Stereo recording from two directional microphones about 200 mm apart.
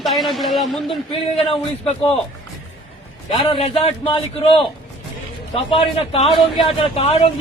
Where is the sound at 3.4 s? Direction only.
25° left (ahead or behind).